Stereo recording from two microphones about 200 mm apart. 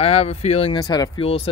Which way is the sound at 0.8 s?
20° left (ahead or behind).